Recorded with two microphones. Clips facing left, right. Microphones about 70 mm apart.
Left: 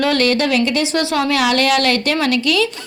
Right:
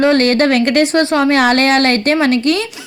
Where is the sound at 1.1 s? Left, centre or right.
Right.